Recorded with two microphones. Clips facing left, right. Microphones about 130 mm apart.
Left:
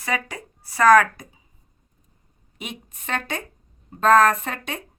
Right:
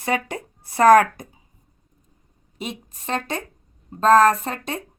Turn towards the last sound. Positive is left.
turn(degrees=-35)  # may be behind; listen again after turning